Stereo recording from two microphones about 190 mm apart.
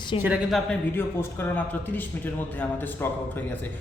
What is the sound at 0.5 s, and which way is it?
A man's voice, 10° left (ahead or behind).